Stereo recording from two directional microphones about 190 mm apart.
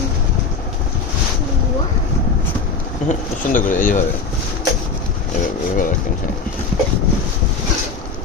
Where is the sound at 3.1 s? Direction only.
45° left (ahead or behind).